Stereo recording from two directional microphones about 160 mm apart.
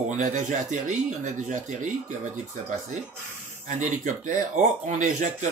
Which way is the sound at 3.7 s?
50° right (ahead or behind).